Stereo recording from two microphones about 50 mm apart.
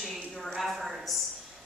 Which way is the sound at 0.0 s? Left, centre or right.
Centre.